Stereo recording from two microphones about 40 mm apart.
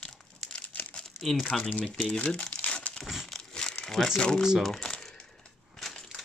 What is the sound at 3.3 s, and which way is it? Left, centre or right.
Crumpling, centre.